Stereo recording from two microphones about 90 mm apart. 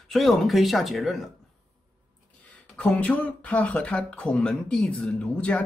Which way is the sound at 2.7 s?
15° left (ahead or behind).